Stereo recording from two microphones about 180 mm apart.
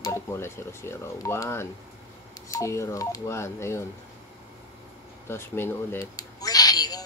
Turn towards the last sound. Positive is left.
turn(degrees=20)  # may be behind; listen again after turning